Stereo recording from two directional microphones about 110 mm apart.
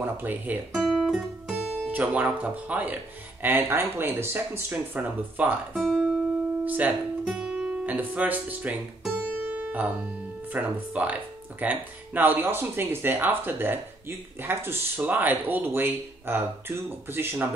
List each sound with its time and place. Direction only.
0.0 s speech: 15° right (ahead or behind)
0.7 s guitar: centre (ahead or behind)
1.9 s speech: 15° right (ahead or behind)
5.9 s music: centre (ahead or behind)
6.6 s speech: 15° right (ahead or behind)
9.1 s music: 15° right (ahead or behind)
10.5 s speech: 15° right (ahead or behind)